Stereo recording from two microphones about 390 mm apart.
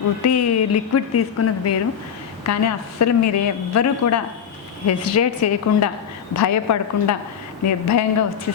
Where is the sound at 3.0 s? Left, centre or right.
Left.